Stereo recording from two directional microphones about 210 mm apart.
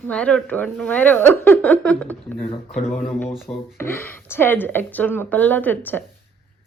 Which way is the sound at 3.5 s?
10° left (ahead or behind).